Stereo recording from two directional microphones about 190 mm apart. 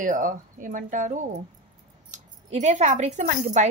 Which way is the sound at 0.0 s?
45° right (ahead or behind).